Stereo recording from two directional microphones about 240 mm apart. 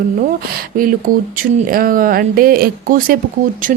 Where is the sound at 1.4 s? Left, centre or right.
Right.